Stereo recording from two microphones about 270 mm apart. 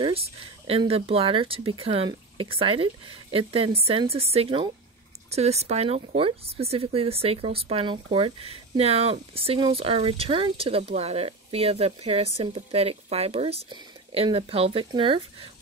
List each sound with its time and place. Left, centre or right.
0.7 s speech: right